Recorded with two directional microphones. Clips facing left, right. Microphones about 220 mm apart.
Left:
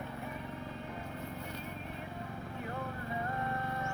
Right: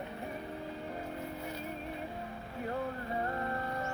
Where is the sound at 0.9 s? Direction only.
40° right (ahead or behind).